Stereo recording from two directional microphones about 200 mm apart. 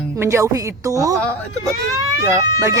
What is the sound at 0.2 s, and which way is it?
Speech, 15° right (ahead or behind).